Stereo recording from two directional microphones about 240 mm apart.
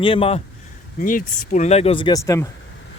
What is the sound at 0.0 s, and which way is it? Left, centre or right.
Speech, left.